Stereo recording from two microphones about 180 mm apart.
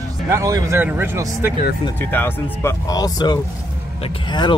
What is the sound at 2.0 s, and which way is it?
Speech, 10° left (ahead or behind).